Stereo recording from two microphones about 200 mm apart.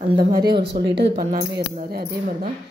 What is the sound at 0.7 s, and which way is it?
Speech, 55° right (ahead or behind).